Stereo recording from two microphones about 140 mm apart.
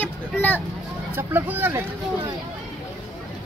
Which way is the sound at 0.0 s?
15° left (ahead or behind).